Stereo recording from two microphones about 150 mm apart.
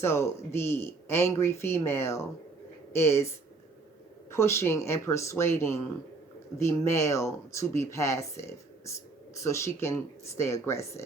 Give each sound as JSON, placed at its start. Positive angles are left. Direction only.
{"t": 0.0, "sound": "speech", "side_deg": 15}
{"t": 4.3, "sound": "speech", "side_deg": 20}